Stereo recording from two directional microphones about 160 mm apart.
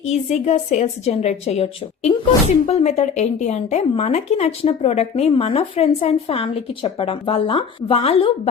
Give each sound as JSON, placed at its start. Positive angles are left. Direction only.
{"t": 0.0, "sound": "speech", "side_deg": 45}